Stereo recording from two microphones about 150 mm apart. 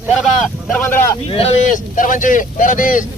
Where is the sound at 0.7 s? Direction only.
15° left (ahead or behind).